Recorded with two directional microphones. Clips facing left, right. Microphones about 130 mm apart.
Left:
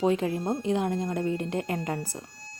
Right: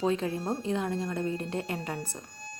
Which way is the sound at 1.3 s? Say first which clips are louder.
Left 3 dB; 30° right (ahead or behind).